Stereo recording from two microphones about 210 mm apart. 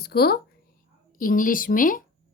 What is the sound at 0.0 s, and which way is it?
A woman's voice, 50° left (ahead or behind).